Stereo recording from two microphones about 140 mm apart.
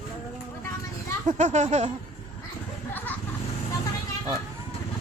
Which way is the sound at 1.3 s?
60° right (ahead or behind).